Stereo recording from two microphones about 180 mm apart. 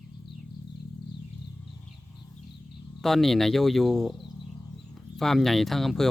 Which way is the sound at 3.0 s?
Centre (ahead or behind).